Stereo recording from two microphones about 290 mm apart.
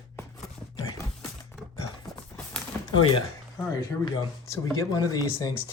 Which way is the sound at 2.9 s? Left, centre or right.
Centre.